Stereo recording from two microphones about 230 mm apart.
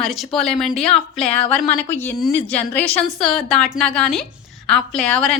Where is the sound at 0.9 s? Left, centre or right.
Left.